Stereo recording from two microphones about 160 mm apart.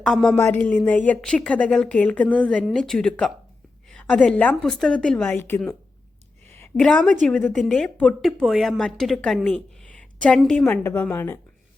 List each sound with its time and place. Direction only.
0.0 s a woman's voice: 5° left (ahead or behind)